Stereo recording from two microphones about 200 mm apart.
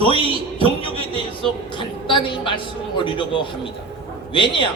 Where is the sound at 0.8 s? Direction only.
30° right (ahead or behind).